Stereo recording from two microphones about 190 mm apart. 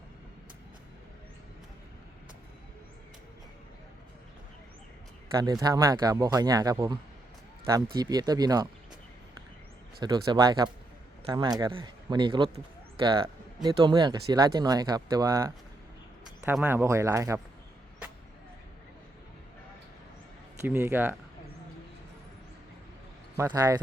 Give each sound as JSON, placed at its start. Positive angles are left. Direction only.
{"t": 5.4, "sound": "speech", "side_deg": -20}
{"t": 10.0, "sound": "speech", "side_deg": -25}
{"t": 20.7, "sound": "speech", "side_deg": -10}
{"t": 23.4, "sound": "speech", "side_deg": -15}